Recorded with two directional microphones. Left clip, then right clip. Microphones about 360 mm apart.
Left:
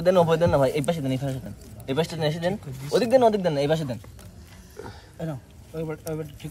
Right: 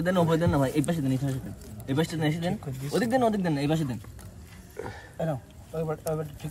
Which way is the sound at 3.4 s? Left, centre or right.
Centre.